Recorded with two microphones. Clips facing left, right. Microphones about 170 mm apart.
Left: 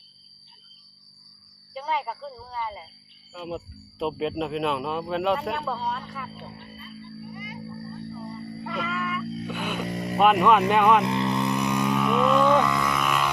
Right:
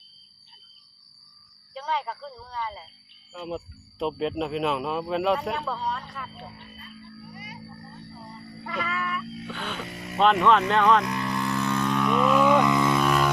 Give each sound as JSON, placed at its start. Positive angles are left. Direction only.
{"t": 1.7, "sound": "speech", "side_deg": 5}
{"t": 6.7, "sound": "music", "side_deg": 25}
{"t": 8.6, "sound": "music", "side_deg": 0}
{"t": 9.5, "sound": "speech", "side_deg": 10}
{"t": 9.8, "sound": "speech", "side_deg": 35}
{"t": 10.2, "sound": "speech", "side_deg": 10}
{"t": 11.0, "sound": "vehicle", "side_deg": 25}